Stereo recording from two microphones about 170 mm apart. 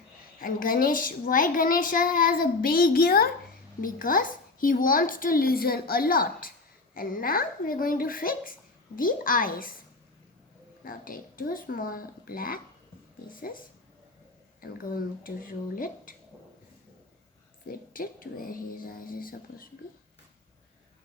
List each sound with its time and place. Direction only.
0.3 s a child's voice: 55° left (ahead or behind)
10.8 s a child's voice: 55° left (ahead or behind)
17.7 s a child's voice: 55° left (ahead or behind)